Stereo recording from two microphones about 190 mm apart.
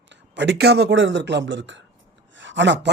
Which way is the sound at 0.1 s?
70° right (ahead or behind).